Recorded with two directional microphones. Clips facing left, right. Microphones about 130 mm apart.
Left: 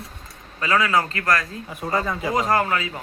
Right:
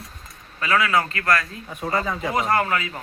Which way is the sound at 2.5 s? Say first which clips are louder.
Left 1 dB; 20° left (ahead or behind).